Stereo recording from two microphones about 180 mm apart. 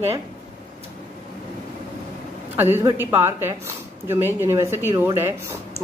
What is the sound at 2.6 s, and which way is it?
Speech, 10° right (ahead or behind).